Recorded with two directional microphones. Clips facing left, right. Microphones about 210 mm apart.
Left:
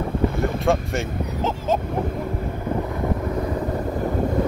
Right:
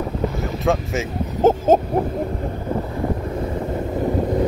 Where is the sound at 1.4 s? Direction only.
50° right (ahead or behind).